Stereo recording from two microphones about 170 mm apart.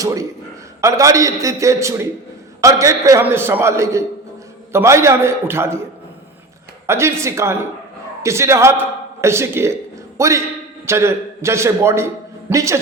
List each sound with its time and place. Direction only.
0.0 s a man's voice: 20° right (ahead or behind)
6.8 s a man's voice: 15° right (ahead or behind)